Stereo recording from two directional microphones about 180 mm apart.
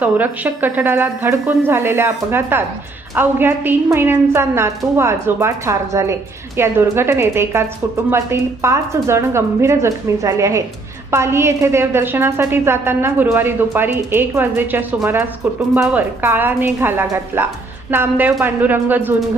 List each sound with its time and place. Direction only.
0.0 s a woman's voice: 10° right (ahead or behind)